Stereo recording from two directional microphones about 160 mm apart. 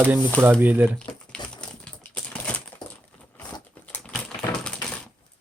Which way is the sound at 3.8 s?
10° left (ahead or behind).